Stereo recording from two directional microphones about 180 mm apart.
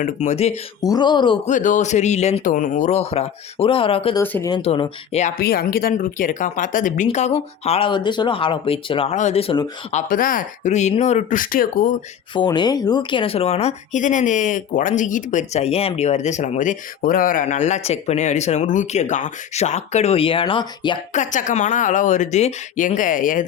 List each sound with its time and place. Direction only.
0.0 s speech: 40° left (ahead or behind)
0.8 s speech: 20° left (ahead or behind)
1.5 s speech: 45° left (ahead or behind)
4.2 s speech: 15° left (ahead or behind)
4.5 s speech: 30° left (ahead or behind)
5.4 s speech: 60° left (ahead or behind); by 10.0 s 30° left (ahead or behind)
10.1 s speech: 50° left (ahead or behind)
12.3 s speech: 25° left (ahead or behind)
21.1 s speech: 45° left (ahead or behind)